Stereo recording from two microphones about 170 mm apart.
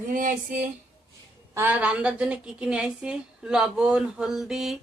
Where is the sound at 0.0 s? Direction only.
50° right (ahead or behind).